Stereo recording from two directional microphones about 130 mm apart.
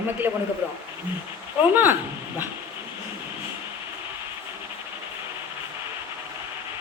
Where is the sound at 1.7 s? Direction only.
15° right (ahead or behind).